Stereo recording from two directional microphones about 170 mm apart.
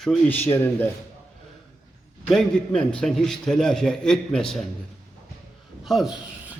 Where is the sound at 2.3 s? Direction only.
5° left (ahead or behind).